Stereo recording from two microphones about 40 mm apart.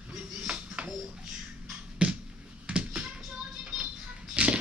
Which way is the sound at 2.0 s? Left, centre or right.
Right.